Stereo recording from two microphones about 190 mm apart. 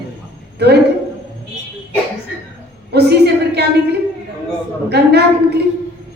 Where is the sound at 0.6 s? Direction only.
60° right (ahead or behind).